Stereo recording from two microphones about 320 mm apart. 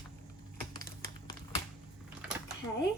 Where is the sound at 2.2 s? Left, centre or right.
Centre.